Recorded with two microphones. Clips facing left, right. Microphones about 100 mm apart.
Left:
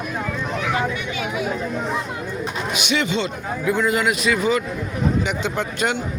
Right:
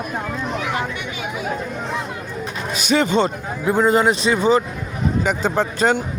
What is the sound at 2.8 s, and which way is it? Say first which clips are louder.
A man's voice: right 6 dB; 40° right (ahead or behind).